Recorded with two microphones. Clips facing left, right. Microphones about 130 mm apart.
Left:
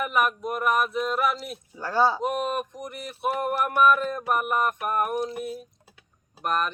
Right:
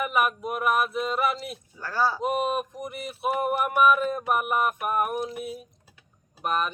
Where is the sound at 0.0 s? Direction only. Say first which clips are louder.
Even; 5° right (ahead or behind).